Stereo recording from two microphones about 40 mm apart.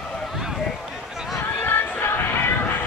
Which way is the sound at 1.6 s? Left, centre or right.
Left.